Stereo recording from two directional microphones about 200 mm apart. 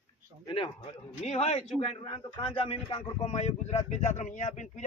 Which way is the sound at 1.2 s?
30° left (ahead or behind).